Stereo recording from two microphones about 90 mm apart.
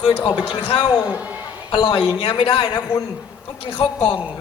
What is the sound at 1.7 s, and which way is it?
A man's voice, 65° left (ahead or behind).